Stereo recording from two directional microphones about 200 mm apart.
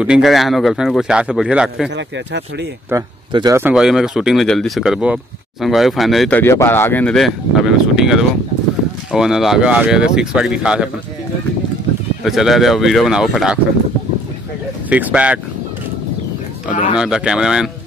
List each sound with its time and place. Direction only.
0.0 s speech: 5° right (ahead or behind)
2.0 s speech: 60° right (ahead or behind)
2.9 s speech: 20° right (ahead or behind)
3.5 s speech: 5° right (ahead or behind)
12.2 s speech: centre (ahead or behind)
14.9 s speech: 5° right (ahead or behind)
16.9 s speech: 5° right (ahead or behind)